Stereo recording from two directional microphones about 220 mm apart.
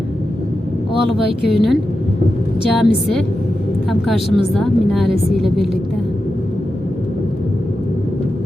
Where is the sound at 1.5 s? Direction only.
Centre (ahead or behind).